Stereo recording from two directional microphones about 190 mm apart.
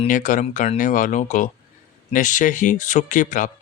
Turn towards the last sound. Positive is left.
turn(degrees=45)  # may be behind; listen again after turning